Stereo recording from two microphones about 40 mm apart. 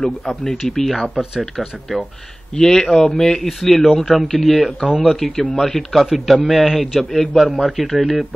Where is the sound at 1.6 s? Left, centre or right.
Centre.